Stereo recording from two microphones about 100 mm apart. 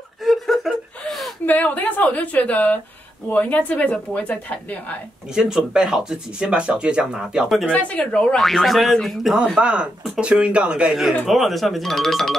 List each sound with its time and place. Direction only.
0.2 s gasp: centre (ahead or behind)
1.4 s a woman's voice: 15° left (ahead or behind)
5.3 s speech: 5° right (ahead or behind)
7.7 s speech: 10° left (ahead or behind)